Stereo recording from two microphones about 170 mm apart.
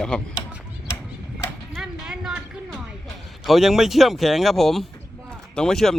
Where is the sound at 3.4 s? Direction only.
Centre (ahead or behind).